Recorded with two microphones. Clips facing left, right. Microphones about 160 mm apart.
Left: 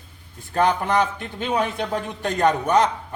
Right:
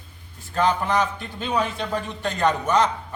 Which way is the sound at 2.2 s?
50° left (ahead or behind).